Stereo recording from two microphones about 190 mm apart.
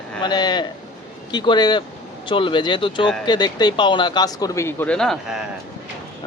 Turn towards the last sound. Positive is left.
turn(degrees=0)  # may be behind; listen again after turning